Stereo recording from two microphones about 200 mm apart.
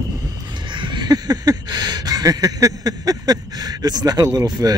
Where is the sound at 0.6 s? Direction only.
25° right (ahead or behind).